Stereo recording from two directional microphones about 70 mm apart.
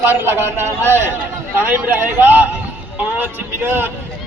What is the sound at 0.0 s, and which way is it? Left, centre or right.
A man's voice, right.